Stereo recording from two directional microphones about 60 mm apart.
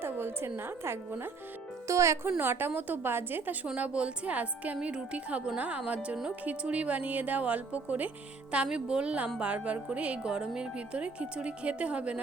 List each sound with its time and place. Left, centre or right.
0.0 s a woman's voice: right
1.9 s speech: right
2.4 s a woman's voice: right
8.5 s speech: centre